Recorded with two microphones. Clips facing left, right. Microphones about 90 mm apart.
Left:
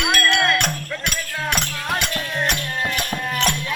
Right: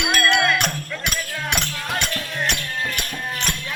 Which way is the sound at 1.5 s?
25° left (ahead or behind).